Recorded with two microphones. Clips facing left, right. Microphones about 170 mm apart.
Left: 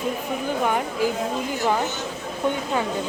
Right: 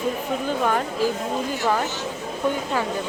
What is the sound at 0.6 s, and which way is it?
Speech, 15° left (ahead or behind).